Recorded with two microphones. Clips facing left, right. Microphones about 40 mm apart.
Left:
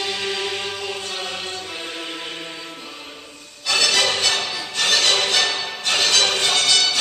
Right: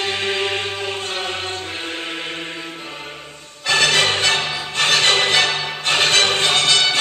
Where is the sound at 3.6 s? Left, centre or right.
Right.